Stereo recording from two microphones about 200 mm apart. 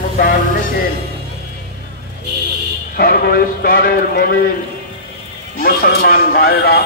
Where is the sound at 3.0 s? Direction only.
50° left (ahead or behind).